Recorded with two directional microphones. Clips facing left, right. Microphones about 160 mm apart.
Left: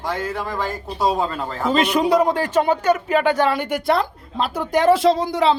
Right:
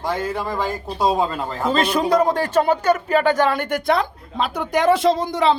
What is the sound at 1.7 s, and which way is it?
Speech, 40° right (ahead or behind).